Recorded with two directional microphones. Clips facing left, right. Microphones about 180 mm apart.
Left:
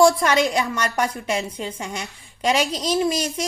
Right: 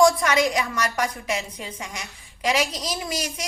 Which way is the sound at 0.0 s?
30° left (ahead or behind).